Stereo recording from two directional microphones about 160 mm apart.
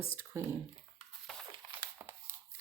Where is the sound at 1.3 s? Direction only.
Centre (ahead or behind).